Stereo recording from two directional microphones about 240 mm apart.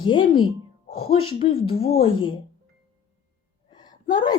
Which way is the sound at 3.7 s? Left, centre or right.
Centre.